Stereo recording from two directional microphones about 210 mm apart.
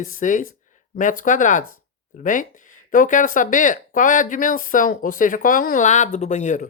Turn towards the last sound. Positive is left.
turn(degrees=35)  # may be behind; listen again after turning